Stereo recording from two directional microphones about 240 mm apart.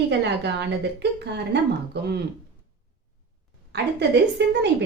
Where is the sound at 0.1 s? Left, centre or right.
Right.